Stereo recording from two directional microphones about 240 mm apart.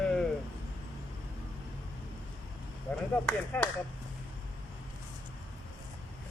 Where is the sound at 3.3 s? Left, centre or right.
Centre.